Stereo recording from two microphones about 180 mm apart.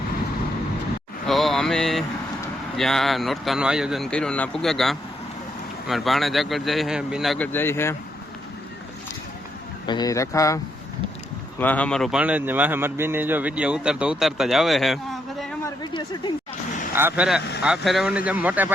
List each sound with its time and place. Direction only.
1.3 s a sound: centre (ahead or behind)
2.7 s speech: centre (ahead or behind)
9.8 s speech: 25° left (ahead or behind)
11.6 s speech: 10° left (ahead or behind)
15.6 s a sound: 25° left (ahead or behind)
16.9 s a man's voice: 10° right (ahead or behind)